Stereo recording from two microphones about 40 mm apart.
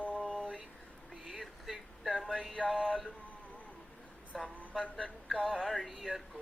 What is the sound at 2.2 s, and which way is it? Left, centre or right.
Music, centre.